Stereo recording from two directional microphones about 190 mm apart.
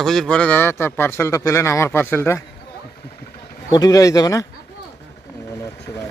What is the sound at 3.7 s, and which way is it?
Speech, 20° left (ahead or behind).